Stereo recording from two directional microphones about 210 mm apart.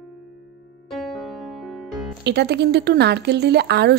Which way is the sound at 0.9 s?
Centre (ahead or behind).